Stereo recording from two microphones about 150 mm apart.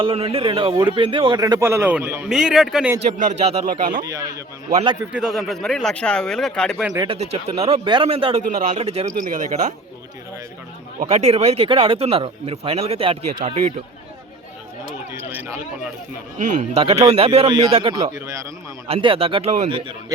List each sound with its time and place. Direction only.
0.0 s a man's voice: 40° right (ahead or behind); by 2.9 s 5° right (ahead or behind)
3.2 s speech: 50° right (ahead or behind)
3.7 s speech: 60° right (ahead or behind)
4.0 s a man's voice: 25° right (ahead or behind)
5.1 s speech: centre (ahead or behind)
7.1 s speech: 45° right (ahead or behind)
9.3 s speech: 55° right (ahead or behind)
11.0 s speech: 45° right (ahead or behind)
13.4 s speech: 50° right (ahead or behind)
15.1 s speech: 15° right (ahead or behind)
16.4 s speech: 55° right (ahead or behind)
16.8 s speech: 45° right (ahead or behind)